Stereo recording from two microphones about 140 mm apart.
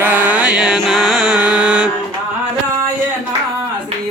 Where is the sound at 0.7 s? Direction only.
Centre (ahead or behind).